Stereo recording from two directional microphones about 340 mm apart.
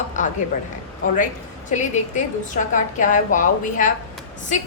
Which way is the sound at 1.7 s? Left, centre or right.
Left.